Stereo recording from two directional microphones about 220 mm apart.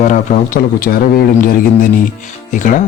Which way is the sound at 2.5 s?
35° left (ahead or behind).